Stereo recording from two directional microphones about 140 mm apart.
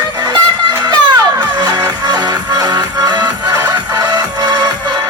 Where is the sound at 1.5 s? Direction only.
30° right (ahead or behind).